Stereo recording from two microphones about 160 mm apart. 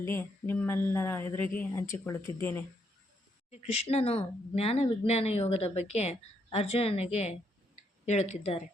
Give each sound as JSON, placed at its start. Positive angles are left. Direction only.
{"t": 0.0, "sound": "speech", "side_deg": 15}
{"t": 3.5, "sound": "speech", "side_deg": 40}